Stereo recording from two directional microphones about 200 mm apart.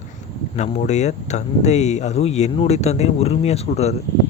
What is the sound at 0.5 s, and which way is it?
Speech, 35° left (ahead or behind).